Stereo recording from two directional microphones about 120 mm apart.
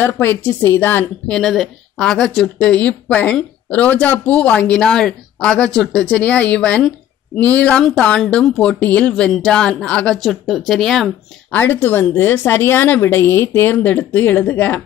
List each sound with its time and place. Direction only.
0.0 s speech: 15° left (ahead or behind)
1.3 s speech: 5° left (ahead or behind)
11.5 s speech: 15° left (ahead or behind)